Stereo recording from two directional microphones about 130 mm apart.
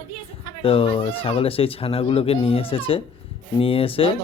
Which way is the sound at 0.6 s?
45° left (ahead or behind).